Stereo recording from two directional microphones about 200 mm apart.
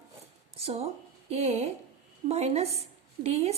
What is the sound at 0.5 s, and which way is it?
A woman's voice, 30° right (ahead or behind).